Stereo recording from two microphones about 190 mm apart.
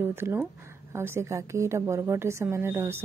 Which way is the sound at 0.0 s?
10° right (ahead or behind).